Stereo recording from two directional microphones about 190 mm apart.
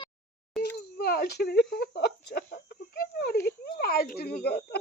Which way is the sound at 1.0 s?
55° left (ahead or behind).